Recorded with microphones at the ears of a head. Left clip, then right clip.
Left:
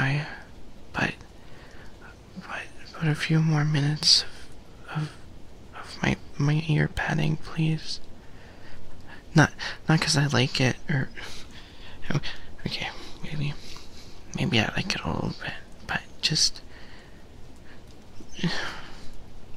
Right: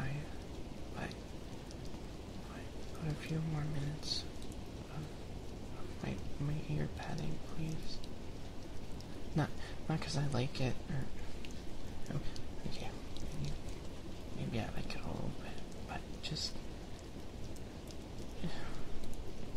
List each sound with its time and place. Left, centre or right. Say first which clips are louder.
0.0 s a sound: left 18 dB; left
2.3 s speech: left 13 dB; left
5.8 s speech: left 18 dB; left
9.3 s speech: left 18 dB; left
12.1 s whispering: left 15 dB; left
14.3 s speech: left 18 dB; left
18.4 s a sound: left 18 dB; left